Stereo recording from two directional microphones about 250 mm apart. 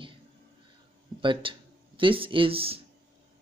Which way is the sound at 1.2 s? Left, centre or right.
Centre.